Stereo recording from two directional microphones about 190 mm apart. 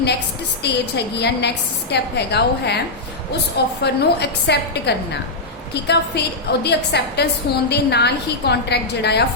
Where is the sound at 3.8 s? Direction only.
60° left (ahead or behind).